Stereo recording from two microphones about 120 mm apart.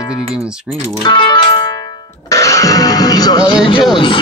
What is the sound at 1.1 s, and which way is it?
Music, 40° left (ahead or behind).